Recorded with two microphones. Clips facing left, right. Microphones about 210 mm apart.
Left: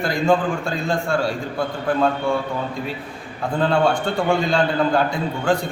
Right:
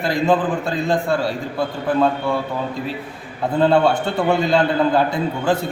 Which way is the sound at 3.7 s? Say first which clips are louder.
Right 2 dB; 5° right (ahead or behind).